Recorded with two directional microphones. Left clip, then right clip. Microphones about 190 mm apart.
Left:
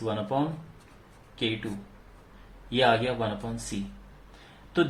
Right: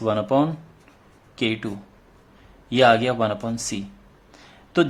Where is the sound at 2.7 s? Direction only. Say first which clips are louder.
Right 7 dB; 55° right (ahead or behind).